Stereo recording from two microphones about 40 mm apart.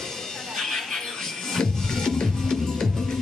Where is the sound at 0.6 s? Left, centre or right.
Centre.